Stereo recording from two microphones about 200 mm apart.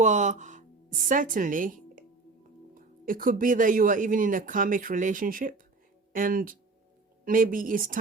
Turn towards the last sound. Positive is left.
turn(degrees=-45)  # may be behind; listen again after turning